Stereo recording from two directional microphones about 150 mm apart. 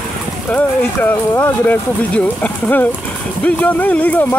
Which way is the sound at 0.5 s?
15° left (ahead or behind).